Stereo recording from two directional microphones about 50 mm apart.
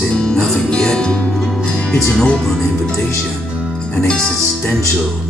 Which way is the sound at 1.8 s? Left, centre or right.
Centre.